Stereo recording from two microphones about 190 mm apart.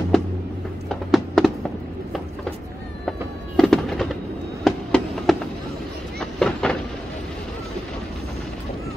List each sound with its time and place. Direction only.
0.8 s music: centre (ahead or behind)
3.1 s fireworks: 5° left (ahead or behind)
6.1 s a sound: 5° left (ahead or behind)